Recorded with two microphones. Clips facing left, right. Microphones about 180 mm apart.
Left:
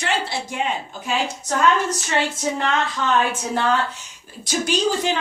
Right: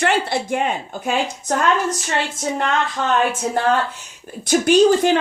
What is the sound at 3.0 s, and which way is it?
Speech, 60° right (ahead or behind).